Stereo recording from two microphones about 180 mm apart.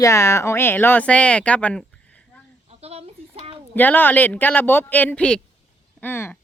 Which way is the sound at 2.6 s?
35° right (ahead or behind).